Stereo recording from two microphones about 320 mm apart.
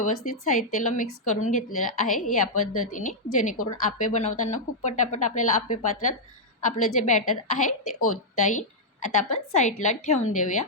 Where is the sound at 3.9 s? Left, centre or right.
Left.